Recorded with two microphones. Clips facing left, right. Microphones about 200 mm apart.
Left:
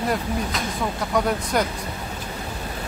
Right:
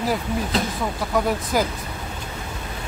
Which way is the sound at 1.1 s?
Centre (ahead or behind).